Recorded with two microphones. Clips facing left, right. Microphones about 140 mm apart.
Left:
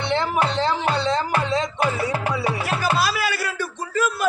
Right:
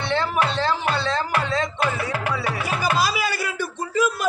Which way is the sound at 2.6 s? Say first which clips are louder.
Right 2 dB; 15° right (ahead or behind).